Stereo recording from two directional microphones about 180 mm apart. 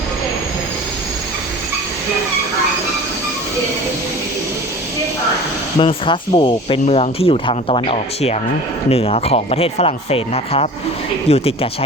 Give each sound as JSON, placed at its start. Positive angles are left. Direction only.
{"t": 5.8, "sound": "speech", "side_deg": 25}